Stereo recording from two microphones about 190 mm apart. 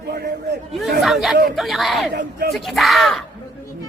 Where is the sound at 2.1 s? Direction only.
60° right (ahead or behind).